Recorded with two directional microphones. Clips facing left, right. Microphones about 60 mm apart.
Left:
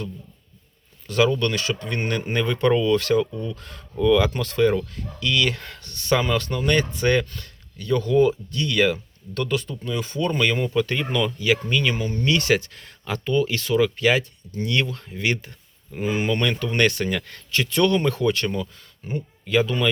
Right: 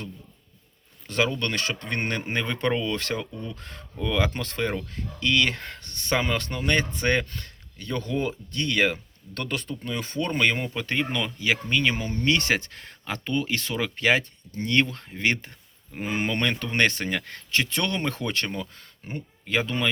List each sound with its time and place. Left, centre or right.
1.0 s speech: right
2.2 s speech: right